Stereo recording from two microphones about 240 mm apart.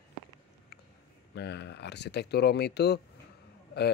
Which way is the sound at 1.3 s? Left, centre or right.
Left.